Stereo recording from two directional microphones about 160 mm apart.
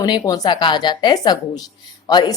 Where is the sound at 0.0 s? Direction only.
25° left (ahead or behind).